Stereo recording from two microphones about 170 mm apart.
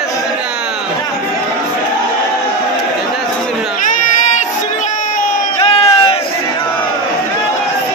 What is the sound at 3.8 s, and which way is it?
Crowd, 45° left (ahead or behind).